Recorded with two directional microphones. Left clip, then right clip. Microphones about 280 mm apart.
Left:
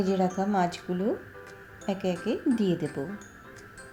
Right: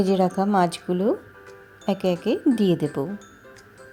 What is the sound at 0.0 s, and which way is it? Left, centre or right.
Speech, right.